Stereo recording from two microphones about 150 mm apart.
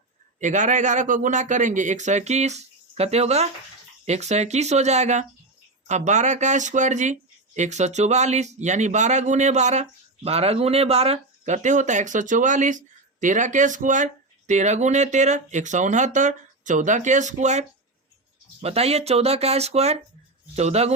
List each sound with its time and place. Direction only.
0.3 s speech: 55° right (ahead or behind)